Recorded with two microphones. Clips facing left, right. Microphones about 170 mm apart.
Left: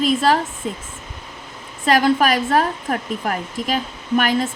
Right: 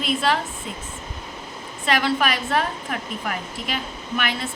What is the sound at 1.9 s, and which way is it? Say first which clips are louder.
A woman's voice: left 6 dB; 40° left (ahead or behind).